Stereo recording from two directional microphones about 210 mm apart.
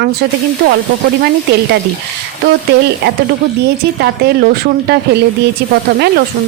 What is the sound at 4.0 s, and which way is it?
Speech, 50° right (ahead or behind).